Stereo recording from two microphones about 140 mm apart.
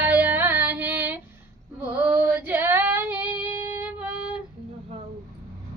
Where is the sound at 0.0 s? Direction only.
10° right (ahead or behind).